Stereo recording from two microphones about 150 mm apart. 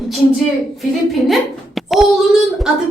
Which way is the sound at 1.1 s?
Centre (ahead or behind).